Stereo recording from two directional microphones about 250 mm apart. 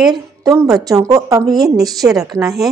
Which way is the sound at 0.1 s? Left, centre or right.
Centre.